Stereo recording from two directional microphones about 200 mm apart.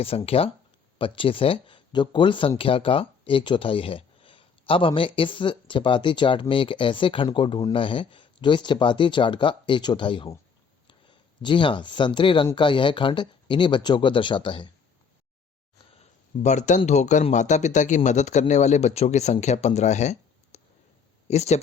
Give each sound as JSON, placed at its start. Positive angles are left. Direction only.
{"t": 0.0, "sound": "speech", "side_deg": 30}
{"t": 11.4, "sound": "speech", "side_deg": 25}
{"t": 16.4, "sound": "a man's voice", "side_deg": 35}